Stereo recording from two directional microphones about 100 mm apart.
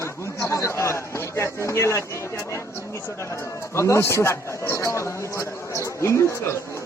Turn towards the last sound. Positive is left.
turn(degrees=30)  # may be behind; listen again after turning